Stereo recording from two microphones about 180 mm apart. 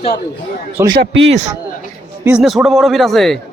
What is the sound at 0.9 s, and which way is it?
Speech, 75° right (ahead or behind).